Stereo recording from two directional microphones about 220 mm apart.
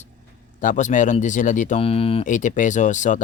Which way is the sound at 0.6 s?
35° left (ahead or behind).